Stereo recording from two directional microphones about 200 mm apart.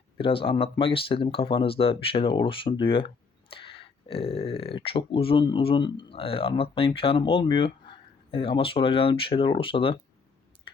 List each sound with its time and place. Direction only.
0.2 s speech: 25° left (ahead or behind)